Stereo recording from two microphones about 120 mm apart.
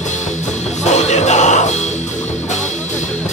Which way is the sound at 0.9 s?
70° left (ahead or behind).